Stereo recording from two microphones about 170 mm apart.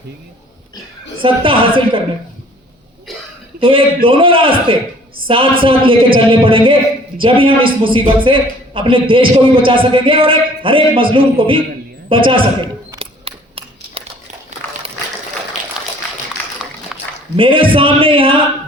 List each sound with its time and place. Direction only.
1.2 s a man's voice: 30° right (ahead or behind)
3.6 s a man's voice: 30° right (ahead or behind)
12.0 s camera: 30° right (ahead or behind)
15.8 s a sound: 5° right (ahead or behind)
16.9 s a sound: 5° right (ahead or behind)
17.3 s a man's voice: 30° right (ahead or behind)